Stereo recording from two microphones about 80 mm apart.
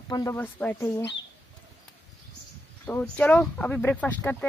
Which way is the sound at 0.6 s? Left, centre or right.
Left.